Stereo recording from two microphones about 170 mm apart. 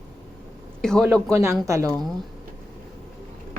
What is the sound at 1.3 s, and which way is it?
Speech, 15° right (ahead or behind).